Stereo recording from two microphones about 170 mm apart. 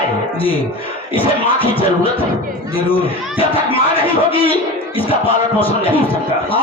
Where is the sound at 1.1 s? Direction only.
30° left (ahead or behind).